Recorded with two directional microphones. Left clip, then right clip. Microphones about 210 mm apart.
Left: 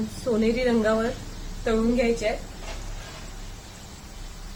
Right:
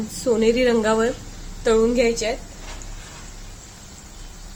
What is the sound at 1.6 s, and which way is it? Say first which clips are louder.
Speech: right 6 dB; 55° right (ahead or behind).